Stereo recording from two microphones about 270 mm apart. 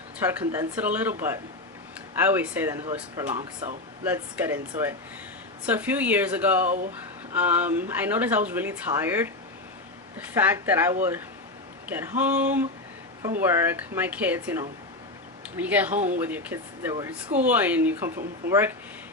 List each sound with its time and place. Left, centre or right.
0.2 s speech: centre
6.7 s speech: right
7.3 s speech: centre